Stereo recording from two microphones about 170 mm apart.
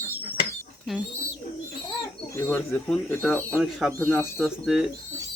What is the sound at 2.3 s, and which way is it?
Speech, 15° left (ahead or behind).